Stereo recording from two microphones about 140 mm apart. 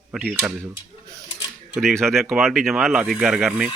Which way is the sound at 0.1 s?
5° right (ahead or behind).